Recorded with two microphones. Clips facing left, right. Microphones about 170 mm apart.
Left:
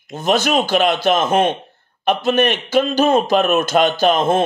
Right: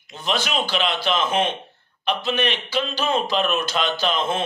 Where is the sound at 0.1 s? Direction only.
45° left (ahead or behind).